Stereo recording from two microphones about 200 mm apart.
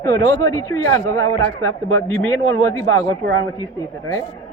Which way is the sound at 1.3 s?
90° right.